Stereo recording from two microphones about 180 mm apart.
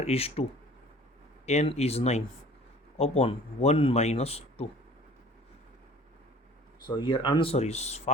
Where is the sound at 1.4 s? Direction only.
35° left (ahead or behind).